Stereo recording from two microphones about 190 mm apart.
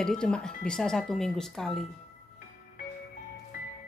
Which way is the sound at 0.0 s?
5° left (ahead or behind).